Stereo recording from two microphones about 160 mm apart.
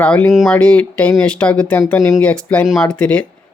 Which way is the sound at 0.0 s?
10° left (ahead or behind).